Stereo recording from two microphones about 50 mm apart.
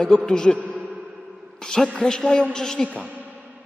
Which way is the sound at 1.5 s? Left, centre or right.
Centre.